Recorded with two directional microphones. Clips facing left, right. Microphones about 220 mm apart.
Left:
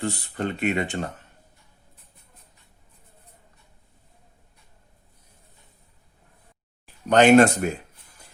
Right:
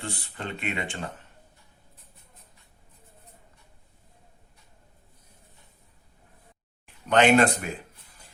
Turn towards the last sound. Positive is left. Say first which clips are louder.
# left 5 dB
turn(degrees=45)  # may be behind; listen again after turning